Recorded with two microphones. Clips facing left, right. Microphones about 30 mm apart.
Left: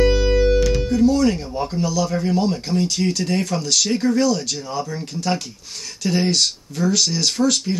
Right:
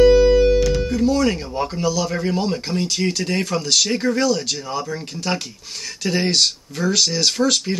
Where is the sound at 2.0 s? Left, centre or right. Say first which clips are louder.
Even; right.